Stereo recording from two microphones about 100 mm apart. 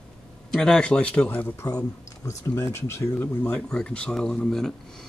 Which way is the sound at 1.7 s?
40° left (ahead or behind).